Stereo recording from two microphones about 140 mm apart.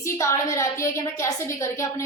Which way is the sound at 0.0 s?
20° left (ahead or behind).